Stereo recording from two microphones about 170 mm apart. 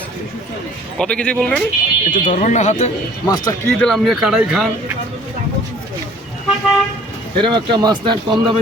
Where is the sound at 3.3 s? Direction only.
20° left (ahead or behind).